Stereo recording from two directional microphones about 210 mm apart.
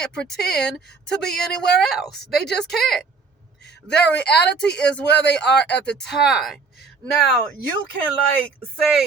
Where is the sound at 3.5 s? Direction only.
55° left (ahead or behind).